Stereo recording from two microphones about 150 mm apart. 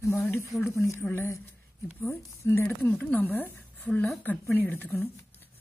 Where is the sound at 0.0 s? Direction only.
15° left (ahead or behind).